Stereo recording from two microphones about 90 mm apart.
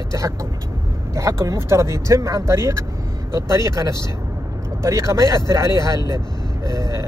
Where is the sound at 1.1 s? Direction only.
35° right (ahead or behind).